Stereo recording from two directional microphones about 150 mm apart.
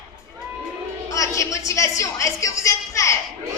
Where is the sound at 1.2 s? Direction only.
20° left (ahead or behind).